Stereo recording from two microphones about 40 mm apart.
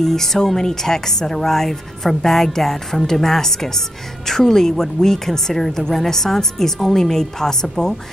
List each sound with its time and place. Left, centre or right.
0.0 s speech: centre